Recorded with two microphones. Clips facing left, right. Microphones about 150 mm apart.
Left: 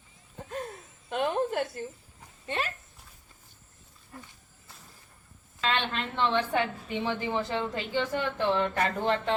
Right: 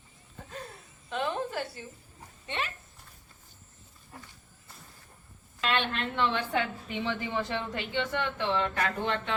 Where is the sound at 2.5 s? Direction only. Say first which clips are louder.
Left 3 dB; 40° left (ahead or behind).